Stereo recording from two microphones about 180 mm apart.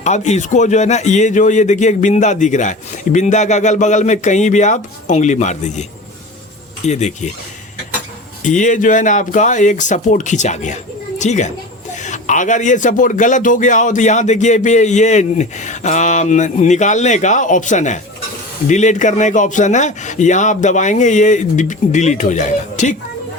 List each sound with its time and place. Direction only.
0.0 s speech: 40° left (ahead or behind)
6.8 s speech: 40° left (ahead or behind)
8.4 s a man's voice: 45° left (ahead or behind)